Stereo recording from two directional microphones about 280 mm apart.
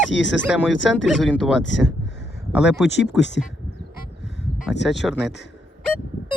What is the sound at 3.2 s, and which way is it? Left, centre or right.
Speech, left.